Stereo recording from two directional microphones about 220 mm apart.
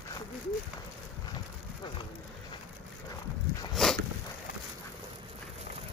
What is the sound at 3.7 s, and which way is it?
Walk, centre (ahead or behind).